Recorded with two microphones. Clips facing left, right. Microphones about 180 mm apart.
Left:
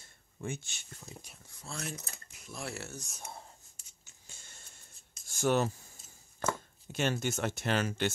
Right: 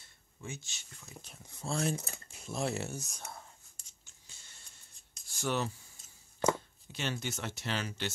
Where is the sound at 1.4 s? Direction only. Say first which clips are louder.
Right 9 dB; 25° right (ahead or behind).